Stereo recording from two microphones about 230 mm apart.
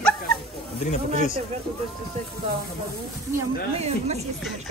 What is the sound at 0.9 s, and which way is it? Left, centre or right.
Speech, left.